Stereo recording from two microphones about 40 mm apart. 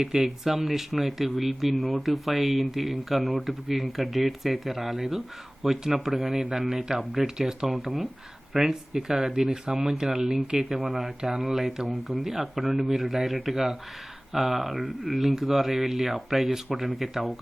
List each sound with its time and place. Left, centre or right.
0.0 s speech: centre